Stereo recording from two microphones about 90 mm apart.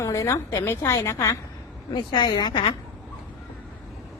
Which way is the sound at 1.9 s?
55° left (ahead or behind).